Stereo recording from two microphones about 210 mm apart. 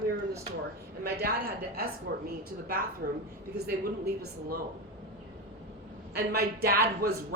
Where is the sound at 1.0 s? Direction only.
45° right (ahead or behind).